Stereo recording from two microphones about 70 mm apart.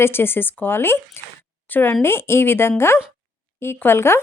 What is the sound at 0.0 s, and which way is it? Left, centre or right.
A woman's voice, left.